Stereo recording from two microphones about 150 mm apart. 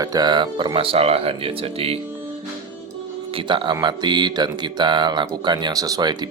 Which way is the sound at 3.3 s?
35° right (ahead or behind).